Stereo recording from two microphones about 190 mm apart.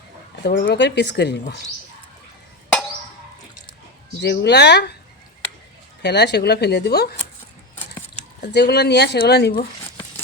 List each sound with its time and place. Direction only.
0.4 s speech: 60° left (ahead or behind)
4.2 s speech: 60° left (ahead or behind)
6.0 s speech: 65° left (ahead or behind)
8.4 s speech: 60° left (ahead or behind)